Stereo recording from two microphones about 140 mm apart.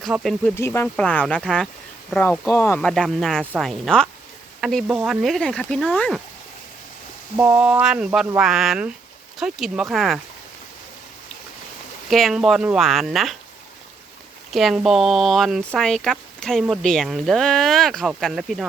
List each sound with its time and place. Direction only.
0.0 s speech: centre (ahead or behind)
0.5 s speech: 20° left (ahead or behind)
1.5 s speech: 5° right (ahead or behind)
2.5 s speech: 15° left (ahead or behind)
2.8 s speech: 5° left (ahead or behind)
7.3 s speech: 15° right (ahead or behind)
12.0 s speech: centre (ahead or behind)
14.5 s speech: centre (ahead or behind)